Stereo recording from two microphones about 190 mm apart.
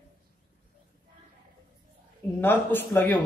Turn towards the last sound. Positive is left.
turn(degrees=10)  # may be behind; listen again after turning